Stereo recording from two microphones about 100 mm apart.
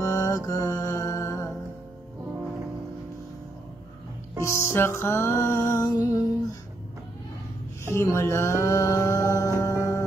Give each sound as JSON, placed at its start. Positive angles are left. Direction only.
{"t": 0.0, "sound": "music", "side_deg": 35}
{"t": 4.4, "sound": "music", "side_deg": 25}
{"t": 7.9, "sound": "music", "side_deg": 25}